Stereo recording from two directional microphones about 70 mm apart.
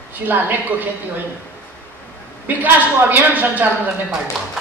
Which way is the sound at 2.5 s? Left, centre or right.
Right.